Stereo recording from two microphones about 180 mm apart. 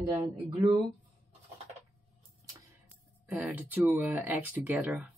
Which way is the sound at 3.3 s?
10° right (ahead or behind).